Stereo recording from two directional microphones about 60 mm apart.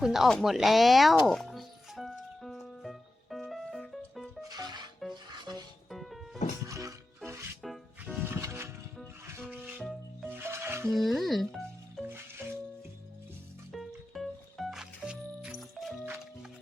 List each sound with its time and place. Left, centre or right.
0.0 s speech: centre
0.4 s music: centre
4.4 s music: right
5.0 s music: centre
6.7 s music: right
8.2 s music: right
9.8 s music: centre
10.2 s music: right
10.9 s music: centre
12.0 s music: right
13.7 s music: centre
15.5 s music: centre